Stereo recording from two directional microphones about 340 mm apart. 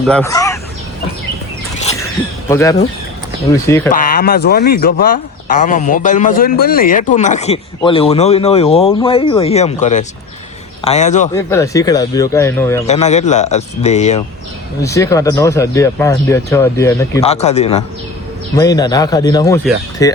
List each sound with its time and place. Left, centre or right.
0.1 s speech: centre
2.5 s speech: centre
3.9 s speech: left
11.3 s speech: centre
12.9 s speech: centre
14.8 s speech: centre